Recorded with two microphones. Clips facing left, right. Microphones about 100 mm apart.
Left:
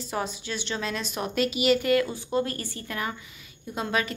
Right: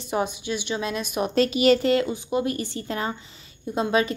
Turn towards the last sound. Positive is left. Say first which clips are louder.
# right 6 dB
turn(degrees=-25)  # may be behind; listen again after turning